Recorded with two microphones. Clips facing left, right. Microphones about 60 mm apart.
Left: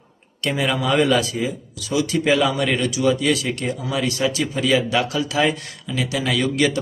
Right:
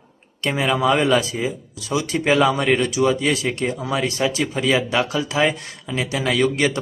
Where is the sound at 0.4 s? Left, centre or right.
Right.